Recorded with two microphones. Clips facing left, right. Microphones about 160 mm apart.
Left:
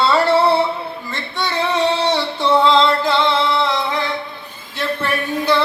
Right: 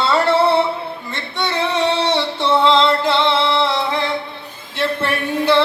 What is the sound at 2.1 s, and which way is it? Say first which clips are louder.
Music: left 1 dB; 25° right (ahead or behind).